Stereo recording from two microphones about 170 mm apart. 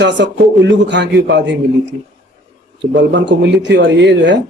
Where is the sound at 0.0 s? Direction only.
90° right.